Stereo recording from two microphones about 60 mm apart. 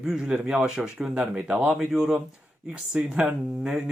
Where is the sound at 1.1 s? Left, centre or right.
Centre.